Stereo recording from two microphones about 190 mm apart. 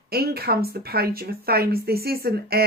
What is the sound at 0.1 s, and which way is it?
Speech, 55° right (ahead or behind).